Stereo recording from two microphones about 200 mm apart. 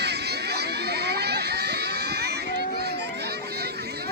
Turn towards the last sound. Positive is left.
turn(degrees=-55)  # may be behind; listen again after turning